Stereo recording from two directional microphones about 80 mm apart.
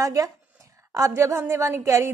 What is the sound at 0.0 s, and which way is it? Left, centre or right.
A woman's voice, right.